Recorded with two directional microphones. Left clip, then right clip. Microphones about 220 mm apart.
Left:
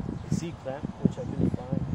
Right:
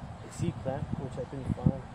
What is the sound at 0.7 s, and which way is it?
Speech, 20° right (ahead or behind).